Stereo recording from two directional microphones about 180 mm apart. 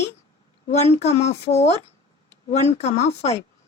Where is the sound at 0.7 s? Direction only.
40° left (ahead or behind).